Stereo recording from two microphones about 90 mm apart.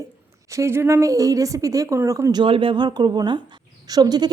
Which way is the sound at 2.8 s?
55° right (ahead or behind).